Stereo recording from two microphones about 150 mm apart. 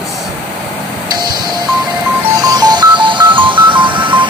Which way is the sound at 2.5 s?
25° right (ahead or behind).